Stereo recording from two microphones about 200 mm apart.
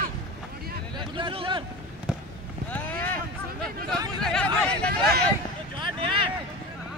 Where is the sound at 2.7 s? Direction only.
10° left (ahead or behind).